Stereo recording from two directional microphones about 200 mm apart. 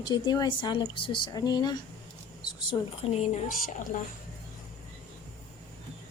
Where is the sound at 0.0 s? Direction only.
20° left (ahead or behind).